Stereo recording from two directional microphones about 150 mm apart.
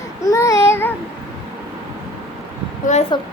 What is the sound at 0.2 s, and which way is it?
Child singing, 20° left (ahead or behind).